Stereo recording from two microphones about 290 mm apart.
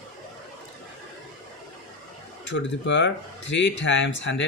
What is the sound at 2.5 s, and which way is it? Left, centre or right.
Speech, left.